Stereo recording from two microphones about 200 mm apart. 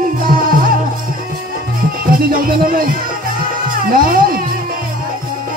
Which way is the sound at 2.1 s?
45° right (ahead or behind).